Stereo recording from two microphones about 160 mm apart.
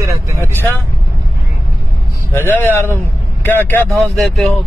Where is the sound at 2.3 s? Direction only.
15° left (ahead or behind).